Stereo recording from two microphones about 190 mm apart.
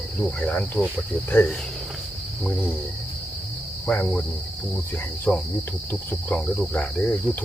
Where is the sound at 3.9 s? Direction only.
5° left (ahead or behind).